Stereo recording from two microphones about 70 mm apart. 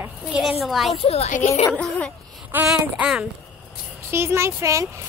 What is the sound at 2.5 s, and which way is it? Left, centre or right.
Speech, right.